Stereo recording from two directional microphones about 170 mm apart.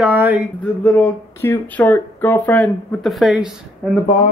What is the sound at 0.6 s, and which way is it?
Speech, 10° left (ahead or behind).